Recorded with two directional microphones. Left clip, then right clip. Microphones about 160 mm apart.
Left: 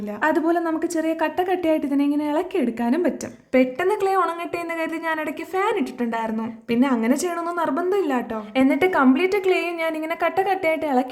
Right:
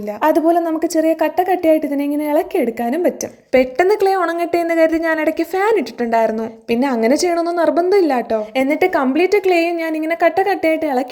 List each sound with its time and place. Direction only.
0.2 s a woman's voice: 20° right (ahead or behind)
3.5 s a woman's voice: 30° right (ahead or behind)